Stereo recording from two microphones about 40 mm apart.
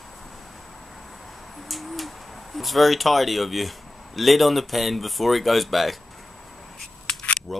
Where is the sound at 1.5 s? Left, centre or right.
Centre.